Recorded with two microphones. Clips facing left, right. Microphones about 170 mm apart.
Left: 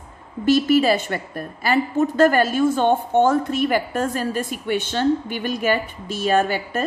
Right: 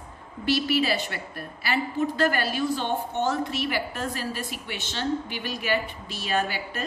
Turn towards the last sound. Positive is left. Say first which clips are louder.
# left 8 dB
turn(degrees=50)  # may be behind; listen again after turning